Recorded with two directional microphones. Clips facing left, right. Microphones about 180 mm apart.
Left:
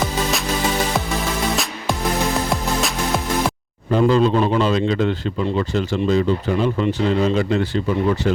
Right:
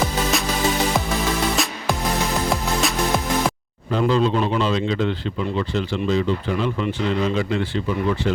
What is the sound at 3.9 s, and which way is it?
A man's voice, 45° left (ahead or behind).